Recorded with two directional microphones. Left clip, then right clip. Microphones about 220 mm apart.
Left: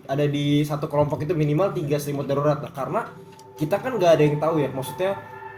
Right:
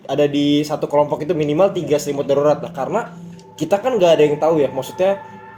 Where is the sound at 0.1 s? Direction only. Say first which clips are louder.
Right 7 dB; 45° right (ahead or behind).